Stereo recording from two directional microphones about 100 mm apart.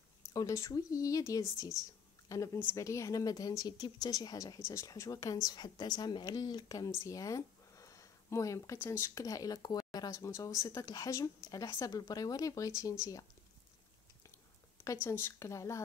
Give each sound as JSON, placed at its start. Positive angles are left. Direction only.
{"t": 0.2, "sound": "a woman's voice", "side_deg": 35}
{"t": 4.6, "sound": "speech", "side_deg": 30}
{"t": 7.1, "sound": "a sound", "side_deg": 35}
{"t": 8.8, "sound": "speech", "side_deg": 25}
{"t": 15.0, "sound": "speech", "side_deg": 25}